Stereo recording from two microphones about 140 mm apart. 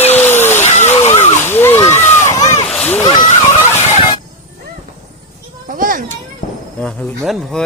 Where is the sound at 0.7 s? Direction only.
55° left (ahead or behind).